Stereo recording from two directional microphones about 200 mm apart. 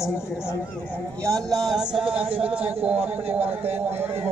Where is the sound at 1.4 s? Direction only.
Centre (ahead or behind).